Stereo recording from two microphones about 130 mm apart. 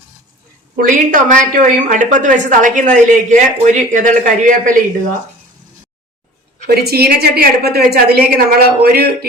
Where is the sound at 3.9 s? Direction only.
85° right.